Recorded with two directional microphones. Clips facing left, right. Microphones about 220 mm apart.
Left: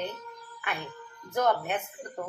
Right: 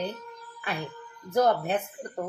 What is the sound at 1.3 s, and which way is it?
Speech, 35° right (ahead or behind).